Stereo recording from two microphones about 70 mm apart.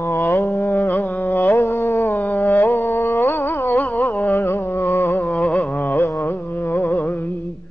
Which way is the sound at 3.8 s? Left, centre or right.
Left.